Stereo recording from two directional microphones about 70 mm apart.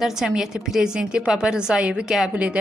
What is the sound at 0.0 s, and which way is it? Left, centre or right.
A woman's voice, centre.